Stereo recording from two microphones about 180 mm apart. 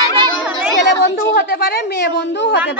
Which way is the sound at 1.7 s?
65° left (ahead or behind).